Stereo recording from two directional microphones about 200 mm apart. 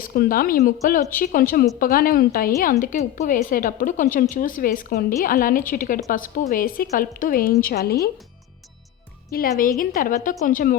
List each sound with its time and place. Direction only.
0.0 s a woman's voice: 45° left (ahead or behind)
9.3 s a woman's voice: 45° left (ahead or behind)